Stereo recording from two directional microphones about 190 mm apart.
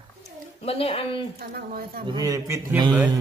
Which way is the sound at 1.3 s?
50° right (ahead or behind).